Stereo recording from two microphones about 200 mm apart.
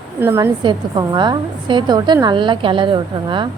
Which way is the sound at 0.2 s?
10° right (ahead or behind).